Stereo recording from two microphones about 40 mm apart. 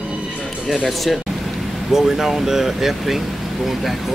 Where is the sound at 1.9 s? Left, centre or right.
Centre.